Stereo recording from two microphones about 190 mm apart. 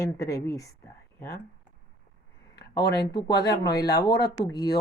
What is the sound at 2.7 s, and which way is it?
Speech, 20° left (ahead or behind).